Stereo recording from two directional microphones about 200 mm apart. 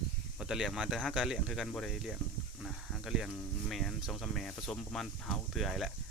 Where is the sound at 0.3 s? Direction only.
Centre (ahead or behind).